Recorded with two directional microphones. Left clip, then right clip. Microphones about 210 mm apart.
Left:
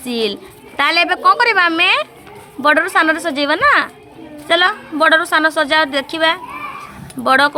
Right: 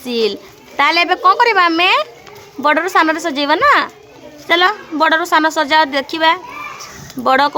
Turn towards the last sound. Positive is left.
turn(degrees=-20)  # may be behind; listen again after turning